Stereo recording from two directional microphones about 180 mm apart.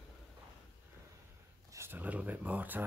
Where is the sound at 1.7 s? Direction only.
15° right (ahead or behind).